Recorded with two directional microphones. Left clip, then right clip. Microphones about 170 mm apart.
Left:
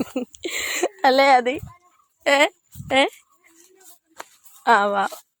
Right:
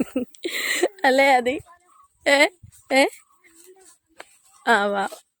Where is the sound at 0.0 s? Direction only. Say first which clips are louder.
Right 1 dB; 25° right (ahead or behind).